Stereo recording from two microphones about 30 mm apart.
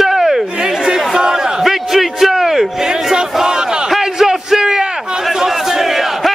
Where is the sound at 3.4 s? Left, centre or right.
Right.